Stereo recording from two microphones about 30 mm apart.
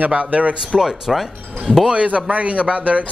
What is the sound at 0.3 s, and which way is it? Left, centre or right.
Speech, right.